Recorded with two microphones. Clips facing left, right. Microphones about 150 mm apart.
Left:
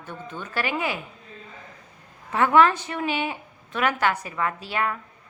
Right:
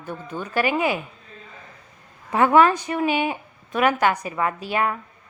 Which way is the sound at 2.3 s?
15° right (ahead or behind).